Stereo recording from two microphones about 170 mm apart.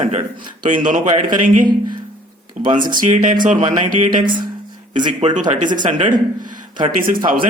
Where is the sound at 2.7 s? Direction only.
50° right (ahead or behind).